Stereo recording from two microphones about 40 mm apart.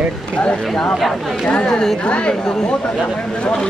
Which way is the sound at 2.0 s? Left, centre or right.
Left.